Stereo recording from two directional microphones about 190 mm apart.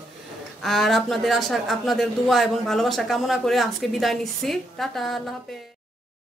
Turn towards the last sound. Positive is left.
turn(degrees=0)  # may be behind; listen again after turning